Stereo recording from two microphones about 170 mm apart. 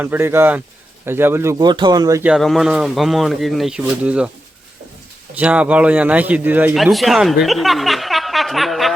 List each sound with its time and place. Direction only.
0.0 s a man's voice: 15° right (ahead or behind)
2.2 s speech: centre (ahead or behind)
5.3 s a man's voice: 10° right (ahead or behind)
6.7 s speech: centre (ahead or behind)